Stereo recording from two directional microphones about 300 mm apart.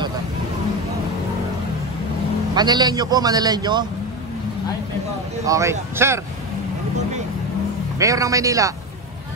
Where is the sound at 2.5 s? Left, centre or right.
Centre.